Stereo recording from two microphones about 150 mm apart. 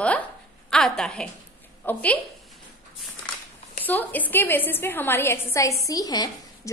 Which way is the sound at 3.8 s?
10° left (ahead or behind).